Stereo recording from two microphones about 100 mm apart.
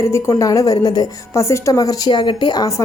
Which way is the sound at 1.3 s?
30° left (ahead or behind).